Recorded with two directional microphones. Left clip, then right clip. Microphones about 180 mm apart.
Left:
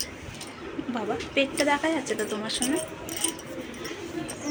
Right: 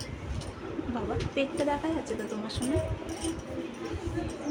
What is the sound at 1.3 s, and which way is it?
Speech, 10° left (ahead or behind).